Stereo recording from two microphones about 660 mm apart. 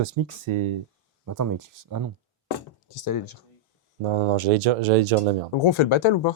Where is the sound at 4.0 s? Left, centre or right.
Right.